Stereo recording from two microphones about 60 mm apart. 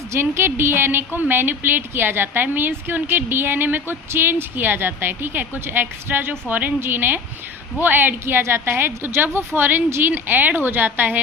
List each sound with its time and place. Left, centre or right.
0.1 s speech: right